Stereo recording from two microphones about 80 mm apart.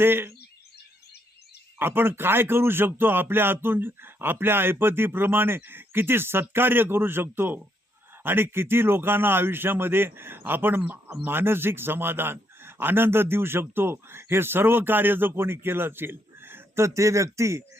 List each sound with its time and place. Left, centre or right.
0.0 s a man's voice: right
1.8 s a man's voice: right